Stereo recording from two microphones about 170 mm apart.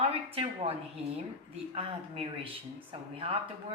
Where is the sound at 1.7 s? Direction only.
35° right (ahead or behind).